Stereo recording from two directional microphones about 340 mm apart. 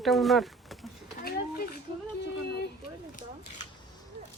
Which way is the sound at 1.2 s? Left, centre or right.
Left.